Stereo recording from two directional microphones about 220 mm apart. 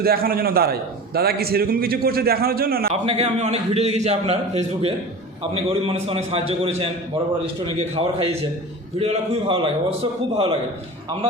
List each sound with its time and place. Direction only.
0.0 s a man's voice: 45° right (ahead or behind)
2.9 s a man's voice: 25° right (ahead or behind)